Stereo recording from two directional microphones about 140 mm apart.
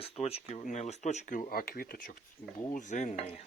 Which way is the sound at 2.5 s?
65° left (ahead or behind).